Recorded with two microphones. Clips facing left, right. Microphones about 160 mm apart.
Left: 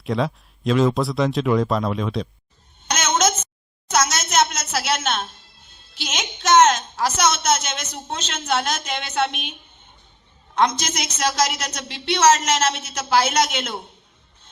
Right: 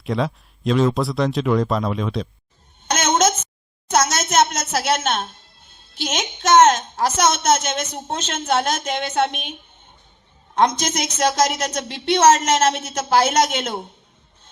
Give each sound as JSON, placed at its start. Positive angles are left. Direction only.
{"t": 0.0, "sound": "speech", "side_deg": 0}
{"t": 2.8, "sound": "a sound", "side_deg": -50}
{"t": 5.9, "sound": "a woman's voice", "side_deg": -50}